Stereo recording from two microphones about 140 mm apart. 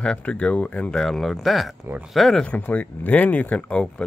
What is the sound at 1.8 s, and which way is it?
Speech, 15° right (ahead or behind).